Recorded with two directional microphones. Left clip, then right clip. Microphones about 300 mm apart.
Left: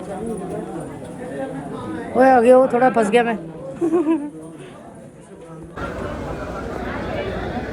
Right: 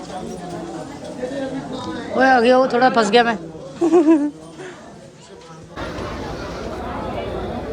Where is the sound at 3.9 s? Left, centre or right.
Right.